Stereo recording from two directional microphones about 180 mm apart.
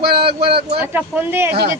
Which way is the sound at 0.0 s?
60° right (ahead or behind).